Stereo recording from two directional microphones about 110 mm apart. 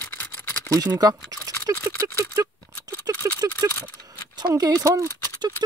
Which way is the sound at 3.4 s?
30° right (ahead or behind).